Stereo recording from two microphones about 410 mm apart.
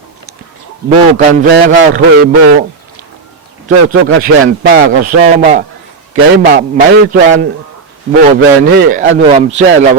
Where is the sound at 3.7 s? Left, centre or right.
Centre.